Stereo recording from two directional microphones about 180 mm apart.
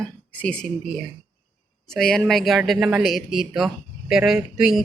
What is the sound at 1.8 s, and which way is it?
Speech, centre (ahead or behind).